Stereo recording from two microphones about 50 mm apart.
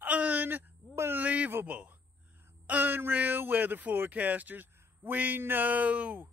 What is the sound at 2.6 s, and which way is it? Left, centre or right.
Speech, right.